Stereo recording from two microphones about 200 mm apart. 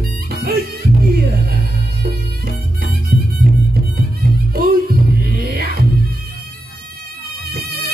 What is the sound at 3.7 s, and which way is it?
Music, 50° right (ahead or behind).